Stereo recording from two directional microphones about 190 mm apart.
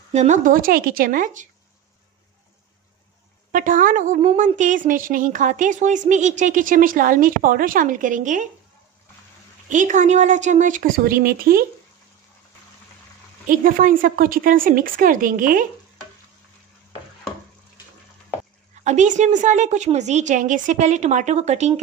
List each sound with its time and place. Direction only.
0.1 s a woman's voice: 40° right (ahead or behind)
3.5 s a woman's voice: 45° right (ahead or behind)
9.7 s a woman's voice: 40° right (ahead or behind)
13.5 s a woman's voice: 45° right (ahead or behind)
18.9 s a woman's voice: 40° right (ahead or behind)